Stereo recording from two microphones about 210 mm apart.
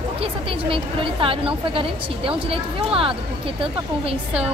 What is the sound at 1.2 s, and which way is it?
Speech, 25° right (ahead or behind).